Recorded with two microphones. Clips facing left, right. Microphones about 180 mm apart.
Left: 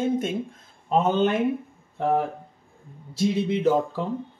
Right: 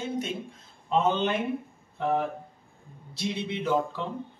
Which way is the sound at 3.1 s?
45° left (ahead or behind).